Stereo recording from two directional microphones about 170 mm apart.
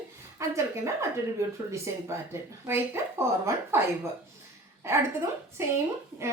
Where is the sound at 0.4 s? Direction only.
20° right (ahead or behind).